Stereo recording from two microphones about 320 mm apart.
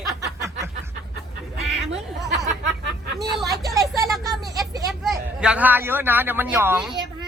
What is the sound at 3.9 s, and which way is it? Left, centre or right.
A man's voice, centre.